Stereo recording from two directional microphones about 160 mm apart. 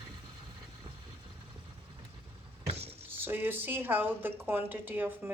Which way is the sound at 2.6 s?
40° right (ahead or behind).